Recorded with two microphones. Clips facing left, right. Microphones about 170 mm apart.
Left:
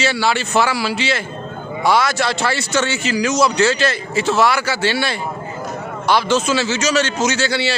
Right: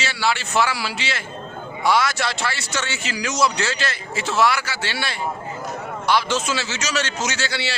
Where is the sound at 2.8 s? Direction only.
30° left (ahead or behind).